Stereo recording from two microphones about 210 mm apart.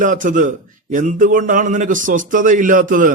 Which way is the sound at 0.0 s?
40° right (ahead or behind).